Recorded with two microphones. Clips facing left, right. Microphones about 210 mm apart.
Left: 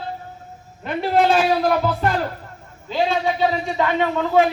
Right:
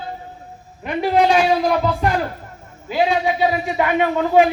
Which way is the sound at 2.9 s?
15° right (ahead or behind).